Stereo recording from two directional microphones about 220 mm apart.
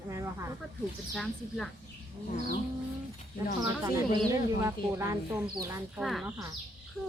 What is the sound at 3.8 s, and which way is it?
A woman's voice, 15° right (ahead or behind).